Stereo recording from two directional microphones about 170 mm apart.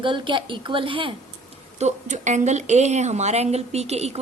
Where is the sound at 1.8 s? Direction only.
45° right (ahead or behind).